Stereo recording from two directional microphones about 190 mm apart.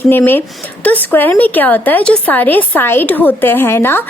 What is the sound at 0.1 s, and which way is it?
A woman's voice, 10° left (ahead or behind).